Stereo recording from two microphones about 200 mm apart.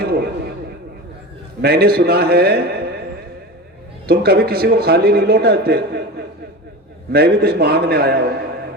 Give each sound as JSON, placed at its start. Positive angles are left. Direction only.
{"t": 0.0, "sound": "a sound", "side_deg": -50}
{"t": 1.6, "sound": "a man's voice", "side_deg": -50}
{"t": 4.0, "sound": "a man's voice", "side_deg": -50}